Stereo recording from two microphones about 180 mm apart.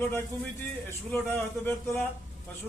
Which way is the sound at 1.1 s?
10° left (ahead or behind).